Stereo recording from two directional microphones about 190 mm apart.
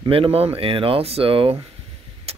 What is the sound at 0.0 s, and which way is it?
Speech, 30° right (ahead or behind).